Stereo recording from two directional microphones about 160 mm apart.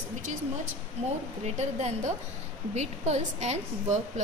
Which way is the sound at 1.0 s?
45° right (ahead or behind).